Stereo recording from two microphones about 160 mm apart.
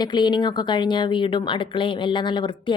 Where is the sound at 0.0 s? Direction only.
30° left (ahead or behind).